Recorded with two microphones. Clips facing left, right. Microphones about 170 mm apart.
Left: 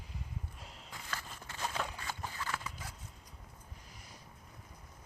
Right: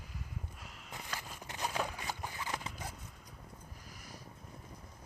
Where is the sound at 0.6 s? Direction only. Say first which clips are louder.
Even; 30° left (ahead or behind).